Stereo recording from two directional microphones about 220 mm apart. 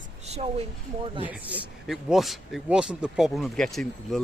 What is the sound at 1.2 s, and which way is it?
Speech, 5° right (ahead or behind).